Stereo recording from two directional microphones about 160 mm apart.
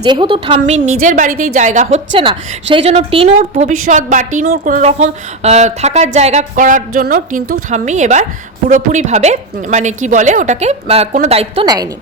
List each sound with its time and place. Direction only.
0.0 s a woman's voice: 30° right (ahead or behind)
0.6 s speech: 50° right (ahead or behind)
2.1 s a woman's voice: 35° right (ahead or behind); by 4.9 s 55° right (ahead or behind)
4.9 s speech: 45° right (ahead or behind)
11.6 s a woman's voice: 25° right (ahead or behind)